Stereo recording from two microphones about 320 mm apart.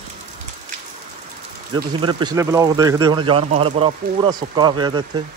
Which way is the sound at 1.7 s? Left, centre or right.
Centre.